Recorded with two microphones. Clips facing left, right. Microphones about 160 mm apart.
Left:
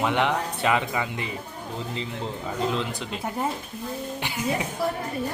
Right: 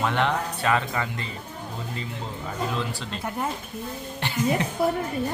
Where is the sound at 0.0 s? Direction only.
15° left (ahead or behind).